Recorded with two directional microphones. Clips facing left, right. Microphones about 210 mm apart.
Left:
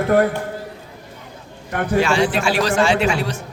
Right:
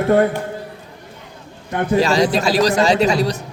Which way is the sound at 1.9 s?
35° right (ahead or behind).